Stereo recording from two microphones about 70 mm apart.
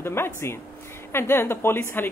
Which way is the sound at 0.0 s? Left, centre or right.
Left.